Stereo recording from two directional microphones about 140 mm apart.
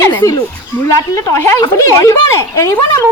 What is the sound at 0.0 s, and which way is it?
Speech, 20° left (ahead or behind).